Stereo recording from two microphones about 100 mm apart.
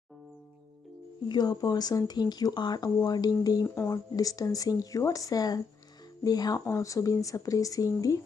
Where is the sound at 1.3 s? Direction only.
40° left (ahead or behind).